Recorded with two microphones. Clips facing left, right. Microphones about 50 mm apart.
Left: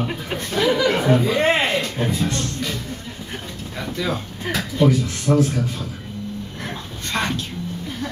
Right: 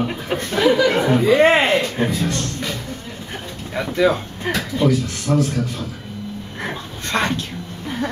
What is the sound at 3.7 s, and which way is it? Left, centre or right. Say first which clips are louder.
Speech: right 8 dB; right.